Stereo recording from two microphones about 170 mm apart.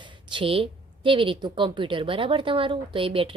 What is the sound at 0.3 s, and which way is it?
A woman's voice, 30° right (ahead or behind).